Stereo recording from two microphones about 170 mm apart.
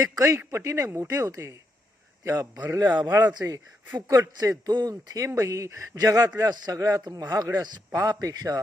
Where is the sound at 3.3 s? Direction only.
20° right (ahead or behind).